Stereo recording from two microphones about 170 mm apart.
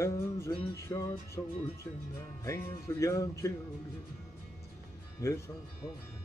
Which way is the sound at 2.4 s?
15° left (ahead or behind).